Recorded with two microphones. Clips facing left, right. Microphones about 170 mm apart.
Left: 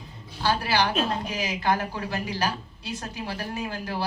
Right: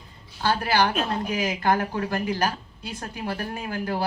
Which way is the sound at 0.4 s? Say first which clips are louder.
Right 2 dB; 50° right (ahead or behind).